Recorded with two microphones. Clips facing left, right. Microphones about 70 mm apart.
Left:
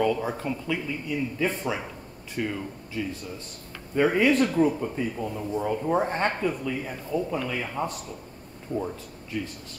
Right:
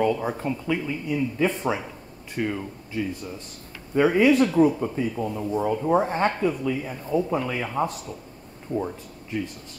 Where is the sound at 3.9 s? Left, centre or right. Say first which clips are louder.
Right 3 dB; centre.